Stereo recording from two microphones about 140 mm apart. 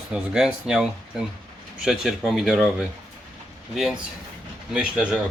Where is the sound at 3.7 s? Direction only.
Centre (ahead or behind).